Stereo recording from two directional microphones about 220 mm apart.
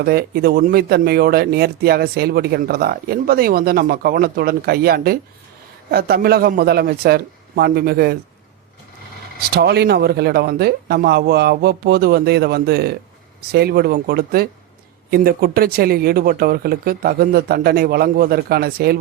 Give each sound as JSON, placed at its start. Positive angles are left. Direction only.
{"t": 0.0, "sound": "speech", "side_deg": -45}
{"t": 9.5, "sound": "speech", "side_deg": -45}